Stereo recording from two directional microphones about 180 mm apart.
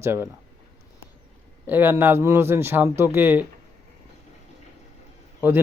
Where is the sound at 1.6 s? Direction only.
10° right (ahead or behind).